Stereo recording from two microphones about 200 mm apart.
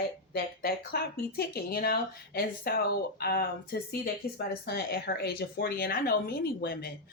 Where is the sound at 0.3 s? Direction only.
50° left (ahead or behind).